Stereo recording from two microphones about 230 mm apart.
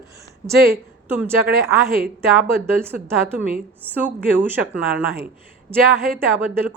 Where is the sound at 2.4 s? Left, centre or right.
Centre.